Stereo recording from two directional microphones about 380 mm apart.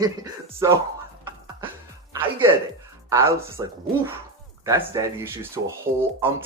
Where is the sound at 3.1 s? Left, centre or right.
Centre.